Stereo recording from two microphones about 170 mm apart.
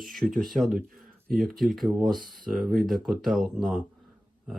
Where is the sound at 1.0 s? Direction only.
60° right (ahead or behind).